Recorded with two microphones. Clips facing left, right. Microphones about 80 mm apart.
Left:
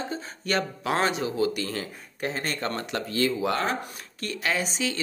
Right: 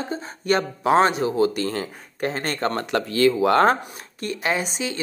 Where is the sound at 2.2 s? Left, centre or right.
Right.